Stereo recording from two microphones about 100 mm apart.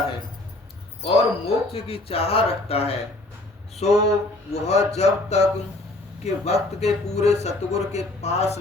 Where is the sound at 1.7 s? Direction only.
70° left (ahead or behind).